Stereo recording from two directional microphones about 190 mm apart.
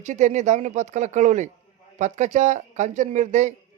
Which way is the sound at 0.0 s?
40° right (ahead or behind).